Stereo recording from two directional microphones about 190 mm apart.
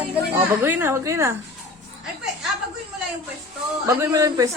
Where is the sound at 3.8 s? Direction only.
15° right (ahead or behind).